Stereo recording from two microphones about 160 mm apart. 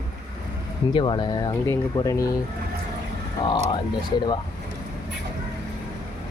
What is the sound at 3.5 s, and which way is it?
Speech, 25° left (ahead or behind).